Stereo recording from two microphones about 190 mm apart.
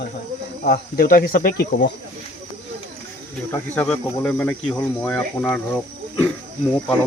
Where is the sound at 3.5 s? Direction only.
10° left (ahead or behind).